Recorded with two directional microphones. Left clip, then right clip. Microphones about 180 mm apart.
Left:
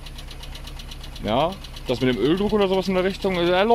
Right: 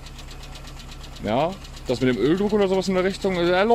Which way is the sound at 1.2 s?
Centre (ahead or behind).